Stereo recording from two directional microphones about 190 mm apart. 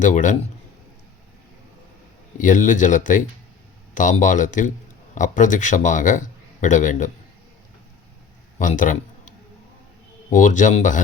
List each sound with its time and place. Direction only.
0.0 s a man's voice: 40° left (ahead or behind)
2.4 s a man's voice: 45° left (ahead or behind)
8.5 s a man's voice: 45° left (ahead or behind)
10.3 s a man's voice: 40° left (ahead or behind)